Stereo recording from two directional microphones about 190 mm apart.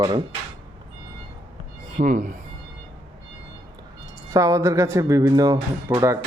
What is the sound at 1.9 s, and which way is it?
Speech, 40° right (ahead or behind).